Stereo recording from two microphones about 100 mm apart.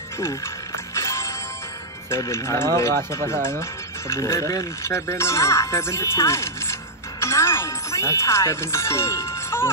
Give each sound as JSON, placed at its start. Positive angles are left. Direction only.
{"t": 0.9, "sound": "music", "side_deg": 30}
{"t": 2.0, "sound": "speech", "side_deg": 30}